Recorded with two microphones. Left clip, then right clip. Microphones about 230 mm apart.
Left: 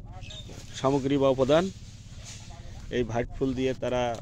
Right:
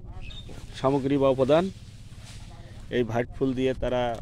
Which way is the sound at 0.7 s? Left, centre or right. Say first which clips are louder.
Right 1 dB; centre.